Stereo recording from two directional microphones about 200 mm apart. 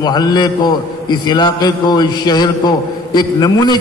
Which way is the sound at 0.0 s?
20° left (ahead or behind).